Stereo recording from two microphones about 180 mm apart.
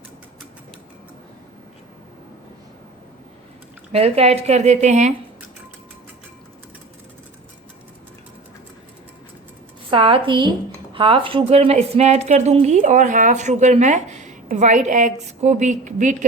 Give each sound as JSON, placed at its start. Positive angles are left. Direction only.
{"t": 3.9, "sound": "a woman's voice", "side_deg": -35}
{"t": 9.9, "sound": "a woman's voice", "side_deg": -30}